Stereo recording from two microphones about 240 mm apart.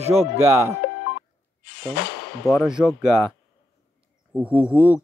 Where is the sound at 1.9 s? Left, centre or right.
Left.